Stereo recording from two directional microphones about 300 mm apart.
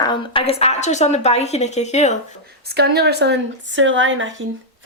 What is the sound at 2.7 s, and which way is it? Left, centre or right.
Speech, right.